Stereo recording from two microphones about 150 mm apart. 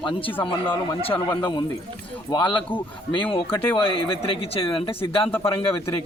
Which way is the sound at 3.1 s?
35° left (ahead or behind).